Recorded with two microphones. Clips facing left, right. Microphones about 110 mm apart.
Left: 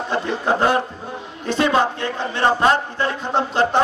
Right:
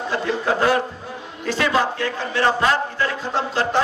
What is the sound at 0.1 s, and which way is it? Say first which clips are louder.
Speech: left 1 dB; 25° left (ahead or behind).